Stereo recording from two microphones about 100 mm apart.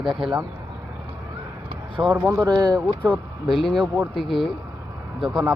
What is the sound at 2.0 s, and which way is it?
Speech, 35° right (ahead or behind).